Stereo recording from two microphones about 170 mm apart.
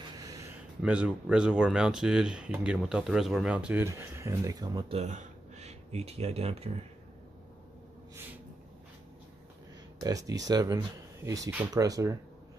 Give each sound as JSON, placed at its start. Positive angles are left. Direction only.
{"t": 0.1, "sound": "a sound", "side_deg": -20}
{"t": 0.8, "sound": "speech", "side_deg": -5}
{"t": 4.9, "sound": "speech", "side_deg": -40}
{"t": 9.9, "sound": "speech", "side_deg": -20}